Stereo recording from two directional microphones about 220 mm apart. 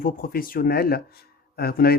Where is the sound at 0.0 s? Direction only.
40° left (ahead or behind).